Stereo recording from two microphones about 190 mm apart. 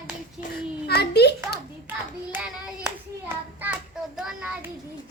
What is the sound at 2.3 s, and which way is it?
Clapping, 10° right (ahead or behind).